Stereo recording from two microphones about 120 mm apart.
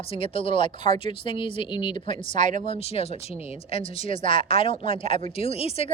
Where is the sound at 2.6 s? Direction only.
55° left (ahead or behind).